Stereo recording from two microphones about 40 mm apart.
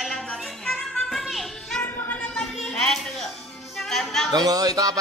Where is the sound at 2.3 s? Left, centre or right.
Centre.